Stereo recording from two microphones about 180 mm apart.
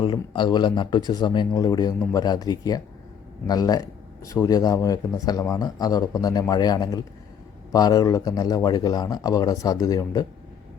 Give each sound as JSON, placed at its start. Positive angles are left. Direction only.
{"t": 0.0, "sound": "speech", "side_deg": 25}